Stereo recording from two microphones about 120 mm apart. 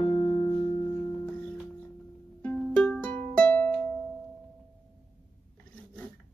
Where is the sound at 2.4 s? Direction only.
10° left (ahead or behind).